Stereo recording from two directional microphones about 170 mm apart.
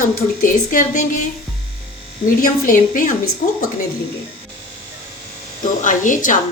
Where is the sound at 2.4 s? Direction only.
55° left (ahead or behind).